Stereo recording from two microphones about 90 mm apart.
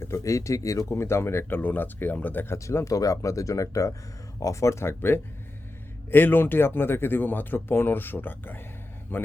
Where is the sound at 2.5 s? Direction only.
30° left (ahead or behind).